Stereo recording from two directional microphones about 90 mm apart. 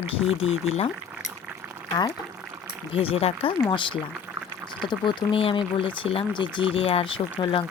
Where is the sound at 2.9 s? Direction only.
90° left.